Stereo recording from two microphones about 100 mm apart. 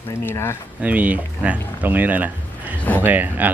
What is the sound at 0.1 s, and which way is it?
Speech, 25° left (ahead or behind).